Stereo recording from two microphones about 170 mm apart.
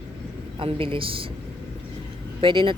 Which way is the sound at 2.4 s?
30° right (ahead or behind).